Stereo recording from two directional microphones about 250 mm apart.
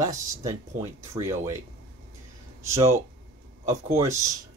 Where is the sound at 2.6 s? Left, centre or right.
Centre.